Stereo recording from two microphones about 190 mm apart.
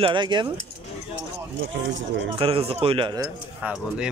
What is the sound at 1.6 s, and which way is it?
Speech, 75° right (ahead or behind).